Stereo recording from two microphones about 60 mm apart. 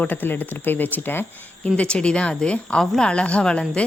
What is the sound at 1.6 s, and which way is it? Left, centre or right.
A woman's voice, centre.